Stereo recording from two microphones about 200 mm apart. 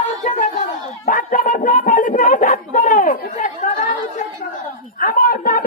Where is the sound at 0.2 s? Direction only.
40° left (ahead or behind).